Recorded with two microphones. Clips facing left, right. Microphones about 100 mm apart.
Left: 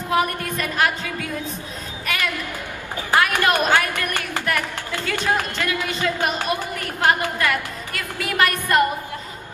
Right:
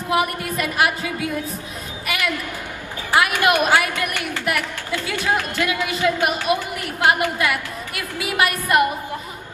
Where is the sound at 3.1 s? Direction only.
15° right (ahead or behind).